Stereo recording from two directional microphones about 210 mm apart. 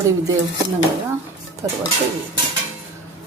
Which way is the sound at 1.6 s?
10° right (ahead or behind).